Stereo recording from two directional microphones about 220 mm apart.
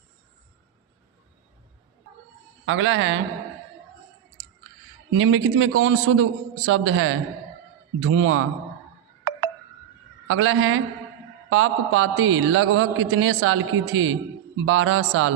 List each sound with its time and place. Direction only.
2.6 s a man's voice: 60° right (ahead or behind)
5.1 s a man's voice: 65° right (ahead or behind)
10.2 s a man's voice: 65° right (ahead or behind)